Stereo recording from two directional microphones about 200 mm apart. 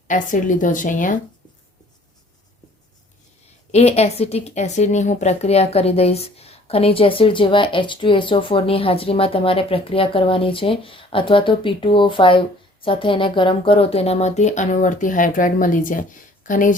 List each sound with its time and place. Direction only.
0.1 s speech: 40° left (ahead or behind)
3.7 s speech: 30° left (ahead or behind)